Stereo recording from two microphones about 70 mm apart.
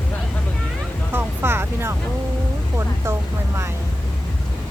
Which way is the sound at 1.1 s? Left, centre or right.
Right.